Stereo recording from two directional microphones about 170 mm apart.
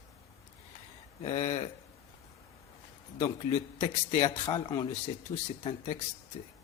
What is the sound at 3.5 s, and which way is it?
Speech, 45° left (ahead or behind).